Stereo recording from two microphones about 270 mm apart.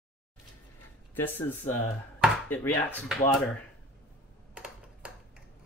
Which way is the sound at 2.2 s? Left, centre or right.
Centre.